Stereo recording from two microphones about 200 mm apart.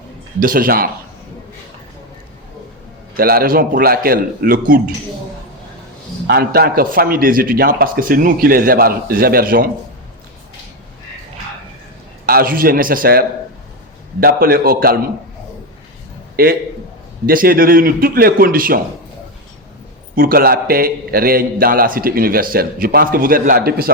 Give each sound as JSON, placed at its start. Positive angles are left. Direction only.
{"t": 0.3, "sound": "a man's voice", "side_deg": -45}
{"t": 3.2, "sound": "a man's voice", "side_deg": -45}
{"t": 6.2, "sound": "a man's voice", "side_deg": -50}
{"t": 12.2, "sound": "a man's voice", "side_deg": -50}
{"t": 16.3, "sound": "a man's voice", "side_deg": -50}
{"t": 20.1, "sound": "a man's voice", "side_deg": -50}